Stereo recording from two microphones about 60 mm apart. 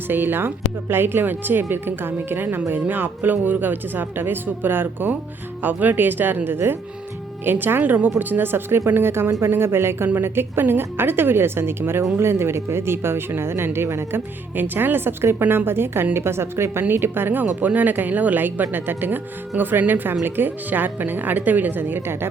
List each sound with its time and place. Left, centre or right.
0.1 s speech: right
14.5 s speech: right